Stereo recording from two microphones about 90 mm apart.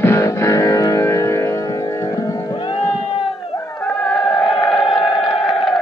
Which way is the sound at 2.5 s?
70° left (ahead or behind).